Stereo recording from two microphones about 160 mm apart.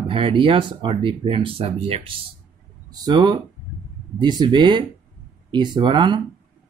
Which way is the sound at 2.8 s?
25° right (ahead or behind).